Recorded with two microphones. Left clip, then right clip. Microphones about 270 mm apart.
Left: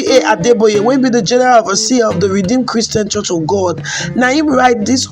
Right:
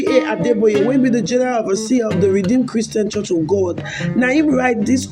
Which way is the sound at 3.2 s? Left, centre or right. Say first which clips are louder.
Left 2 dB; left.